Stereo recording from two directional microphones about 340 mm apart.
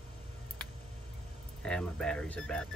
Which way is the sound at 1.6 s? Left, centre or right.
Centre.